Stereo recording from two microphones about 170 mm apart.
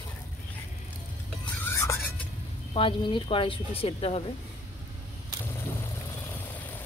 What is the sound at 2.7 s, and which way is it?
Speech, 30° left (ahead or behind).